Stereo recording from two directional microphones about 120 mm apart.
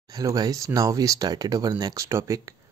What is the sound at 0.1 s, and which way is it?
Speech, 30° right (ahead or behind).